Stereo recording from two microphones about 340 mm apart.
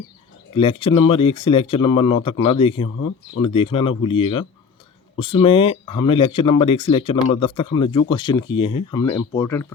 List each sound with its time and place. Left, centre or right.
0.5 s speech: centre